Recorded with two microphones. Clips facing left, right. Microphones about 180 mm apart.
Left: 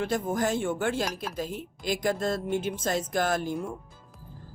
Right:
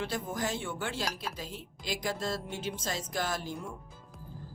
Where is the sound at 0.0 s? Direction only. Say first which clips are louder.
Left 7 dB; 50° left (ahead or behind).